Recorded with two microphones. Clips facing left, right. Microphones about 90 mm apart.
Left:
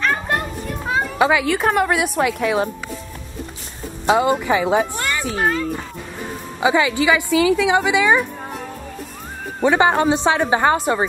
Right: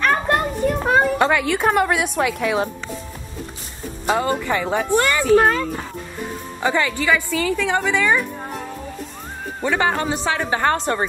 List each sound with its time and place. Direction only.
0.0 s children playing: 55° right (ahead or behind)
1.1 s speech: 5° left (ahead or behind)
4.1 s a woman's voice: 10° left (ahead or behind)
4.9 s a woman's voice: 80° right
6.6 s a woman's voice: 10° left (ahead or behind)
9.6 s a woman's voice: 15° left (ahead or behind)